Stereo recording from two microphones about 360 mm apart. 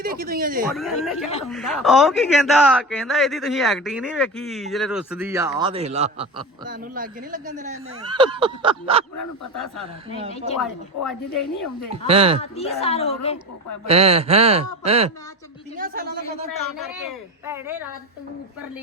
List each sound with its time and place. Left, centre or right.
0.0 s speech: right
0.7 s speech: centre
11.0 s speech: centre
12.0 s speech: centre
12.4 s a woman's voice: centre
13.8 s speech: centre
16.9 s speech: centre